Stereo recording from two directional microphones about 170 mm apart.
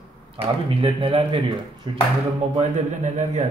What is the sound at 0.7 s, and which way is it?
Speech, 30° right (ahead or behind).